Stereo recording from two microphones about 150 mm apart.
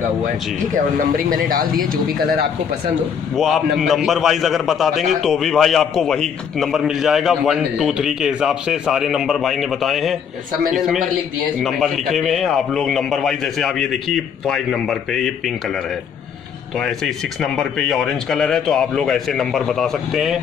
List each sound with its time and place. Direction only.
0.9 s a man's voice: 70° right (ahead or behind); by 2.4 s 90° right
3.3 s a man's voice: centre (ahead or behind)
11.6 s a man's voice: centre (ahead or behind)
16.7 s a man's voice: 5° left (ahead or behind)